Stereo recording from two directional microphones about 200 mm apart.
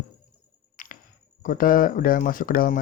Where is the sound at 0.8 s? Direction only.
45° left (ahead or behind).